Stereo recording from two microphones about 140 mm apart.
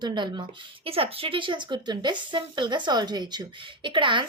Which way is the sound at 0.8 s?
45° right (ahead or behind).